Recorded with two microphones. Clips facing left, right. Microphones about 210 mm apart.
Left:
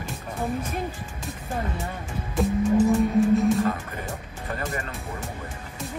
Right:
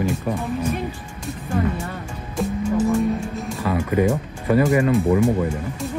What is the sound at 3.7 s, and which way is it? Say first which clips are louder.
Speech: right 12 dB; 90° right.